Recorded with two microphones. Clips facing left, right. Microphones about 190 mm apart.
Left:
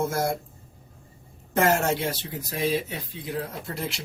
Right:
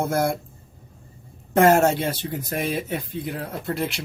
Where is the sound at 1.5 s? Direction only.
55° right (ahead or behind).